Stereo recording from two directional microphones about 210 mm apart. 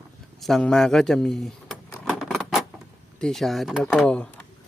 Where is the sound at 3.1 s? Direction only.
Centre (ahead or behind).